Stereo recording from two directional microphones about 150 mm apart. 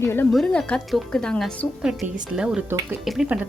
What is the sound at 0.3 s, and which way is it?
A woman's voice, 5° left (ahead or behind).